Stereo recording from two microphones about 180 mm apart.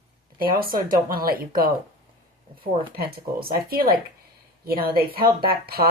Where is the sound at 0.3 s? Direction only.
55° right (ahead or behind).